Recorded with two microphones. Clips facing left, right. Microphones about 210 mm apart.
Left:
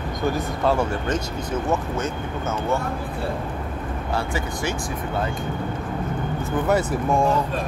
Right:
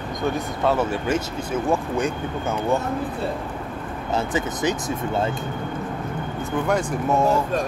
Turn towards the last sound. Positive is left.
turn(degrees=-5)  # may be behind; listen again after turning